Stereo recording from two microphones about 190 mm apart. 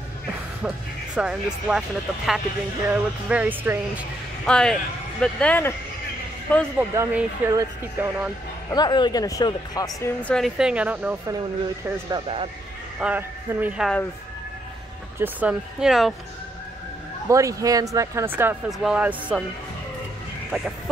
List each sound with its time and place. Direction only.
1.1 s speech: 5° right (ahead or behind)
4.5 s speech: 5° left (ahead or behind)
6.8 s speech: 10° right (ahead or behind)
8.7 s a man's voice: 20° left (ahead or behind)
10.2 s speech: centre (ahead or behind)
12.1 s speech: 30° right (ahead or behind)
13.0 s speech: 10° right (ahead or behind)
15.1 s speech: 10° right (ahead or behind)
17.3 s speech: 15° right (ahead or behind)